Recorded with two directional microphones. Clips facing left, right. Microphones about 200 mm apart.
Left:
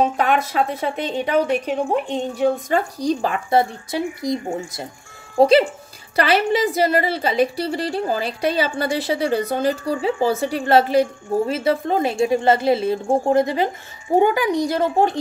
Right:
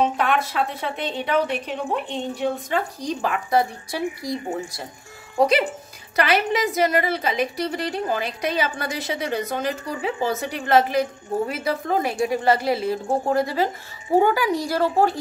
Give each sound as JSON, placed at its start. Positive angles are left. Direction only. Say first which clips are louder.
{"t": 0.2, "sound": "a woman's voice", "louder": "left 3 dB", "side_deg": 40}